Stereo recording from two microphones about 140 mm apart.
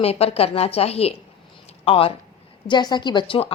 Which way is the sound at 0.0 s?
45° left (ahead or behind).